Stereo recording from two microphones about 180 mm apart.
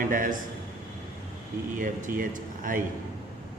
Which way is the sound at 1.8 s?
50° right (ahead or behind).